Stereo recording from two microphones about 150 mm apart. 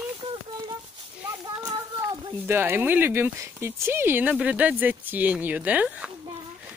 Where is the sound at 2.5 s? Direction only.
15° right (ahead or behind).